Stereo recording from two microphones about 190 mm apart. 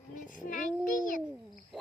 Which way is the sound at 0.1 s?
45° left (ahead or behind).